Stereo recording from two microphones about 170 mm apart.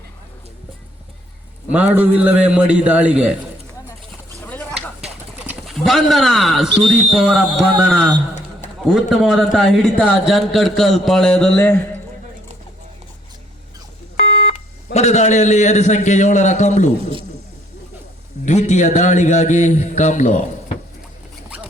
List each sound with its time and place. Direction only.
1.7 s a man's voice: 10° right (ahead or behind)
5.4 s a man's voice: 5° right (ahead or behind)
14.2 s smoke detector: 55° left (ahead or behind)
14.9 s a man's voice: 40° left (ahead or behind)
18.4 s a man's voice: 45° left (ahead or behind)